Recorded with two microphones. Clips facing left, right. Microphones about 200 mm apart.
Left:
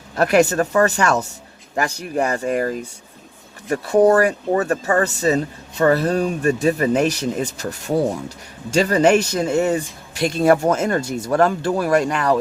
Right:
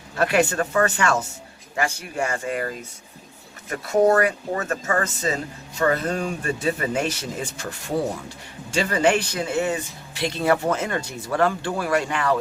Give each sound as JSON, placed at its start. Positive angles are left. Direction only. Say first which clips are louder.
{"t": 0.3, "sound": "speech", "louder": "left 6 dB", "side_deg": 40}
{"t": 2.3, "sound": "speech", "louder": "left 6 dB", "side_deg": 40}